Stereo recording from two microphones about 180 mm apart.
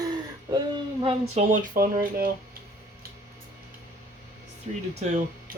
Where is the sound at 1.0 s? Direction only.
35° right (ahead or behind).